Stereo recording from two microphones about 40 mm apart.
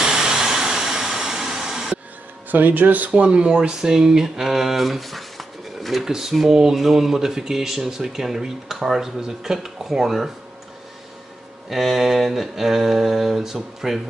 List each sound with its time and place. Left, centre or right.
0.0 s a sound: centre
2.5 s speech: right
3.1 s speech: right; by 10.3 s centre
11.7 s speech: centre